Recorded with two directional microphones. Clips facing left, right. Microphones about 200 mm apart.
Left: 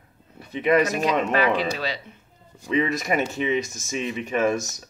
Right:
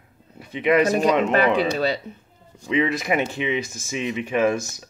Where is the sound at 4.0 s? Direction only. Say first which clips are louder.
Right 2 dB; 15° right (ahead or behind).